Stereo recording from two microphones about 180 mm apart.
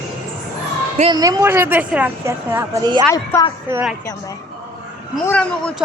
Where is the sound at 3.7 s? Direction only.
10° right (ahead or behind).